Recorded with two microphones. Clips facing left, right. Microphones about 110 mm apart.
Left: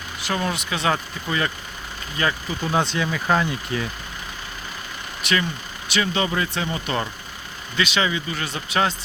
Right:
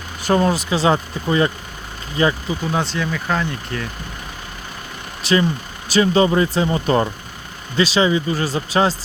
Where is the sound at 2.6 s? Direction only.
Centre (ahead or behind).